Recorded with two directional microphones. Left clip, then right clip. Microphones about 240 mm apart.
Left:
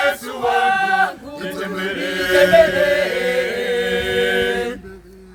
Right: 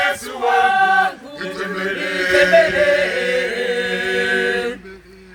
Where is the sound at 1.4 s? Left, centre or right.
Left.